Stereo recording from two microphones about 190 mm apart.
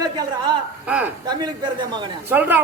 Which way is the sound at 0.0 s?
20° right (ahead or behind).